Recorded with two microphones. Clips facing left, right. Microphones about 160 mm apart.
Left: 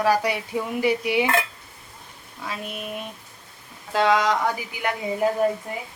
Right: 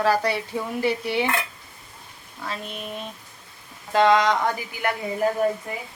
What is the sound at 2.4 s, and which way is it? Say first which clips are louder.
Speech: left 1 dB; 10° left (ahead or behind).